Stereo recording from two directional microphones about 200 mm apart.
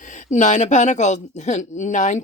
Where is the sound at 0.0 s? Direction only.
40° left (ahead or behind).